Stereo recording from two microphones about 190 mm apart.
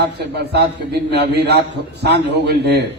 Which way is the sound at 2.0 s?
60° right (ahead or behind).